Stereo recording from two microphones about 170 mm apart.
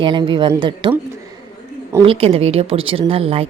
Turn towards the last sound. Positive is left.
turn(degrees=-35)  # may be behind; listen again after turning